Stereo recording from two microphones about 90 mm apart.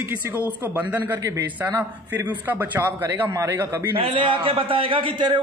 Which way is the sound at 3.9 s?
80° right.